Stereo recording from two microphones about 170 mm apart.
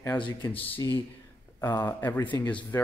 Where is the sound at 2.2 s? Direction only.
25° left (ahead or behind).